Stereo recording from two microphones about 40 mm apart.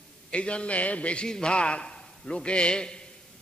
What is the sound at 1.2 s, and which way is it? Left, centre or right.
A man's voice, left.